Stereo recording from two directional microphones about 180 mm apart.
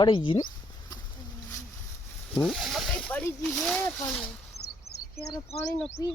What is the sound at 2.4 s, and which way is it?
Speech, centre (ahead or behind).